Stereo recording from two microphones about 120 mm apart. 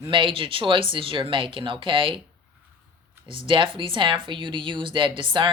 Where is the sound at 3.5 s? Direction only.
45° right (ahead or behind).